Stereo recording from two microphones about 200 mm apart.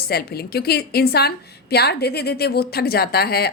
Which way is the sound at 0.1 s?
50° left (ahead or behind).